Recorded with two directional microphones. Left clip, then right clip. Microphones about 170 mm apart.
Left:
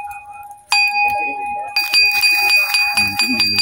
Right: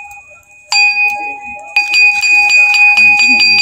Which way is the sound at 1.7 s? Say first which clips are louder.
Right 6 dB; 15° left (ahead or behind).